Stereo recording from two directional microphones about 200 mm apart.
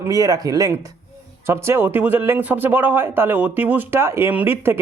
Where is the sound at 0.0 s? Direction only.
15° right (ahead or behind).